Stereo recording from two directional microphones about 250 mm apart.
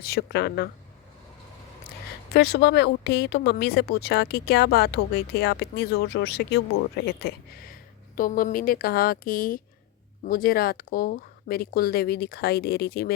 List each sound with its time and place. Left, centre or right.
0.0 s speech: left
2.3 s speech: left